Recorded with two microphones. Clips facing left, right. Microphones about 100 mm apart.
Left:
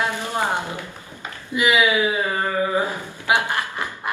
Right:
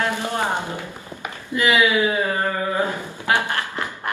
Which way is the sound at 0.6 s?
20° right (ahead or behind).